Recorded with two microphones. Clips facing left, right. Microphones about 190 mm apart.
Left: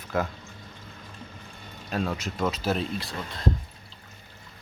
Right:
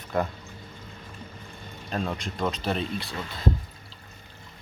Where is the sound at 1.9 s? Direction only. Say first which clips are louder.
Left 1 dB; 5° left (ahead or behind).